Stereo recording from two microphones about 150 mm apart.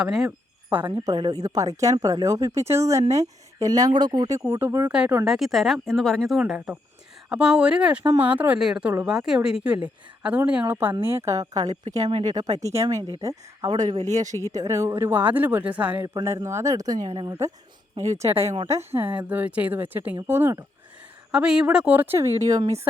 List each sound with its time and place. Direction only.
0.0 s speech: centre (ahead or behind)
0.9 s speech: 30° right (ahead or behind)
11.6 s speech: 45° right (ahead or behind)
12.2 s speech: 25° right (ahead or behind)
14.0 s speech: 50° right (ahead or behind)
14.5 s speech: 20° right (ahead or behind)
21.3 s speech: 5° right (ahead or behind); by 22.7 s 25° right (ahead or behind)